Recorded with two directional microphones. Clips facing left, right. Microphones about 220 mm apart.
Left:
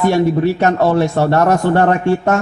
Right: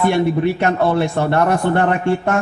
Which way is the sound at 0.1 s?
40° left (ahead or behind).